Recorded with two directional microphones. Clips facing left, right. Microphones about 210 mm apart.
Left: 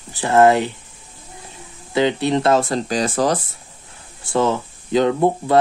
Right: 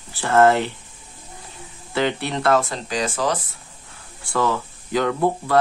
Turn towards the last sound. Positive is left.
turn(degrees=20)  # may be behind; listen again after turning